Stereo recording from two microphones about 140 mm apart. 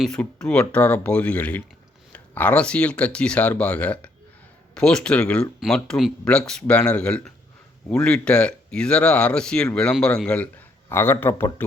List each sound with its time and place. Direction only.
0.0 s speech: 5° left (ahead or behind)